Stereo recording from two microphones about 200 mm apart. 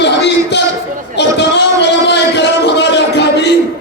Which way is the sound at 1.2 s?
60° left (ahead or behind).